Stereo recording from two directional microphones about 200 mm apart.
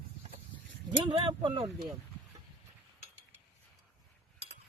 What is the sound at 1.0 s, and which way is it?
Speech, 25° right (ahead or behind).